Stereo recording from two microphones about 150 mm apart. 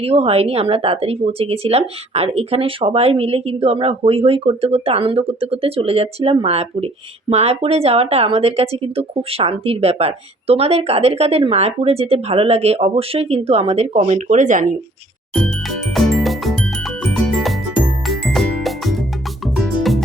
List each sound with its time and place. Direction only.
0.0 s speech: 40° right (ahead or behind); by 14.8 s 60° right (ahead or behind)
16.0 s music: centre (ahead or behind)